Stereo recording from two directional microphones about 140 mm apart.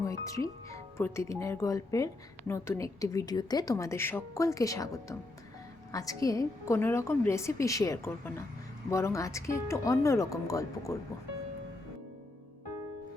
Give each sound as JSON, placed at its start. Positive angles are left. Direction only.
{"t": 0.0, "sound": "speech", "side_deg": 25}